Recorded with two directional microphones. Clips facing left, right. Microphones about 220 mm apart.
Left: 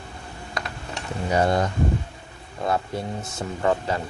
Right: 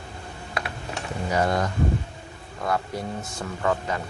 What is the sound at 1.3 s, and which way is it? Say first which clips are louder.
Speech: left 3 dB; 25° left (ahead or behind).